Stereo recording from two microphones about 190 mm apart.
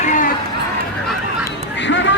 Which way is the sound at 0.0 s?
40° left (ahead or behind).